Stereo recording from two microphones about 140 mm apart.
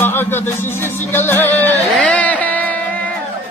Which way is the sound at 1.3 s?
15° left (ahead or behind).